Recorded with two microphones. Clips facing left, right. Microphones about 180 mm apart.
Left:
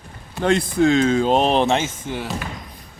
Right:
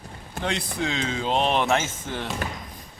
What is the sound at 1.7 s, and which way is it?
Speech, 15° left (ahead or behind).